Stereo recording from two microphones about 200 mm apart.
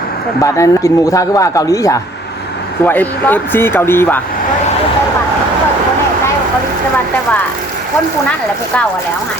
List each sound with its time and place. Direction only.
0.4 s speech: 15° left (ahead or behind)